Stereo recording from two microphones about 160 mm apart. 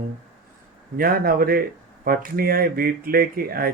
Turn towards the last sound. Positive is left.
turn(degrees=-65)  # may be behind; listen again after turning